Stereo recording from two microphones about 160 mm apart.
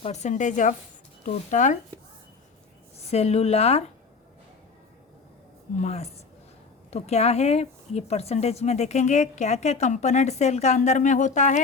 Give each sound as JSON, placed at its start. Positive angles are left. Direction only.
{"t": 0.0, "sound": "speech", "side_deg": 45}
{"t": 3.1, "sound": "speech", "side_deg": 40}
{"t": 5.8, "sound": "speech", "side_deg": 40}